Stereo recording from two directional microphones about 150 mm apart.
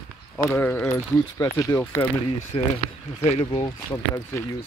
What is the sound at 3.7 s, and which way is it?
Speech, 20° left (ahead or behind).